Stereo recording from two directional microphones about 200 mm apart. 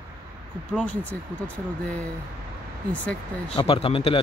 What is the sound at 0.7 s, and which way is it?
Speech, 5° left (ahead or behind).